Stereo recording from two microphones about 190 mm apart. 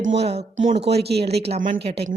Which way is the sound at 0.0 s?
30° right (ahead or behind).